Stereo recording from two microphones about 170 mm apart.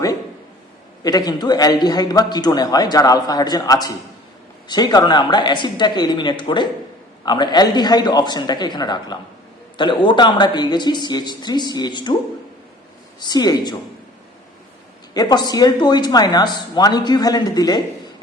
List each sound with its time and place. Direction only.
1.0 s a man's voice: 20° left (ahead or behind)
13.1 s a man's voice: 25° left (ahead or behind)
15.1 s a man's voice: 25° left (ahead or behind)